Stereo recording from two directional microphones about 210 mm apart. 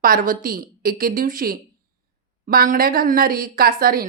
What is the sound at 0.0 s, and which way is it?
A woman's voice, 45° right (ahead or behind).